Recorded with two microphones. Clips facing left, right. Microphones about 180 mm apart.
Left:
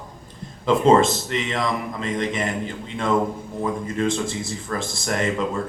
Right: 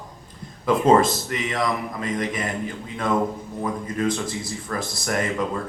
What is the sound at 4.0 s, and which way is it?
Speech, 25° left (ahead or behind).